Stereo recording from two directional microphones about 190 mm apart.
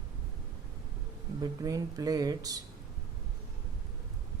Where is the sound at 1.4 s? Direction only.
20° right (ahead or behind).